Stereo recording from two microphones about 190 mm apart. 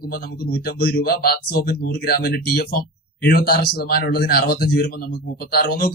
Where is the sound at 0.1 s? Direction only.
55° left (ahead or behind).